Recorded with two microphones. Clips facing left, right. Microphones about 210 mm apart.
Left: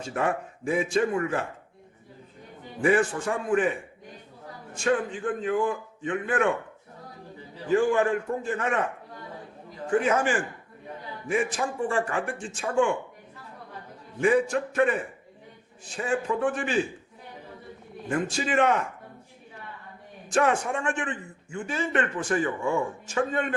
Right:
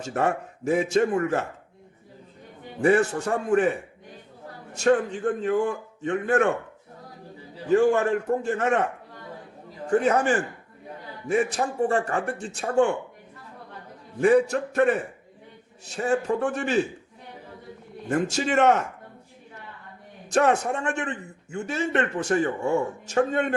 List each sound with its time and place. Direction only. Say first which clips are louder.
0.0 s speech: right 2 dB; 45° right (ahead or behind)
2.8 s speech: right 2 dB; 40° right (ahead or behind)
4.7 s speech: right 4 dB; 45° right (ahead or behind)
5.4 s a man's voice: right 2 dB; 65° right (ahead or behind)
5.6 s speech: right 1 dB; 45° right (ahead or behind)
7.9 s speech: right 2 dB; 45° right (ahead or behind)
9.9 s speech: right 3 dB; 40° right (ahead or behind)
14.2 s speech: right 3 dB; 40° right (ahead or behind)
18.3 s speech: right 3 dB; 45° right (ahead or behind)
20.3 s speech: right 2 dB; 40° right (ahead or behind)